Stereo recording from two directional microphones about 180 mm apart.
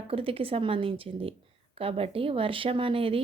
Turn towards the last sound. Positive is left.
turn(degrees=-30)  # may be behind; listen again after turning